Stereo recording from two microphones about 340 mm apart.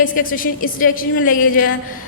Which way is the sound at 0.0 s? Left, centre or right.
Left.